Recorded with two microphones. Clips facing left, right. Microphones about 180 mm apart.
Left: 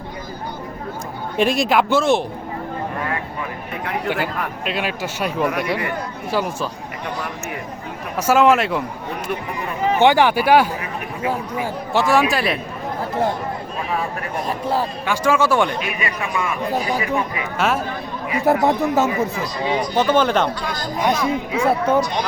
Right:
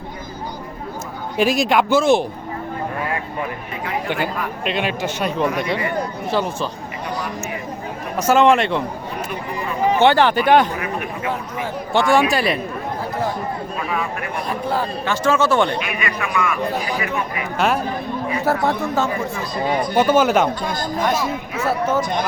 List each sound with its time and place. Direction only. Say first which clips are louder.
1.4 s speech: even; centre (ahead or behind)
4.1 s speech: even; 5° left (ahead or behind)
8.2 s speech: right 1 dB; 5° left (ahead or behind)
10.0 s speech: left 1 dB; 15° left (ahead or behind)
13.9 s speech: left 2 dB; 35° left (ahead or behind)
15.0 s speech: right 1 dB; 10° left (ahead or behind)
15.8 s speech: even; 35° left (ahead or behind)
17.6 s speech: right 1 dB; centre (ahead or behind)
18.4 s speech: left 4 dB; 20° left (ahead or behind)
20.0 s speech: right 2 dB; 10° right (ahead or behind)
20.6 s speech: right 2 dB; 50° right (ahead or behind)
21.6 s speech: left 2 dB; 5° right (ahead or behind)
22.0 s speech: right 1 dB; 50° right (ahead or behind)